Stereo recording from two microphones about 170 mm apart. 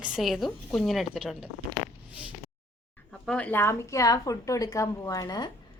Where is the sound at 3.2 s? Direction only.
5° left (ahead or behind).